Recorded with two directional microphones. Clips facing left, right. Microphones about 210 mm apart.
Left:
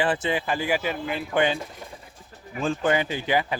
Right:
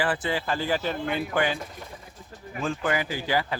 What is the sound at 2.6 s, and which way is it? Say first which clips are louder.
Speech: left 4 dB; 30° left (ahead or behind).